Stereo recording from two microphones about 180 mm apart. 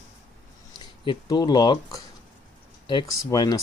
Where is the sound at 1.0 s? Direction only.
25° left (ahead or behind).